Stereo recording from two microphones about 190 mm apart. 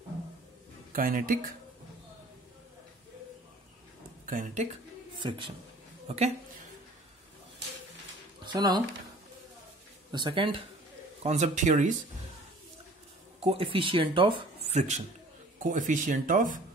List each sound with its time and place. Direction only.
0.9 s speech: 45° right (ahead or behind)
4.3 s speech: 45° right (ahead or behind)
6.0 s a woman's voice: 35° right (ahead or behind)
8.5 s speech: 20° right (ahead or behind)
10.1 s speech: 25° right (ahead or behind)
11.2 s speech: 40° right (ahead or behind)
13.4 s speech: 30° right (ahead or behind)